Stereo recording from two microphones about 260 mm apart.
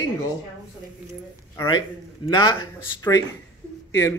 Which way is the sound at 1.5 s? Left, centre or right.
Centre.